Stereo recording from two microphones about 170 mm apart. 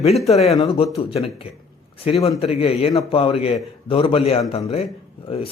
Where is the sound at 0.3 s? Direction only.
40° left (ahead or behind).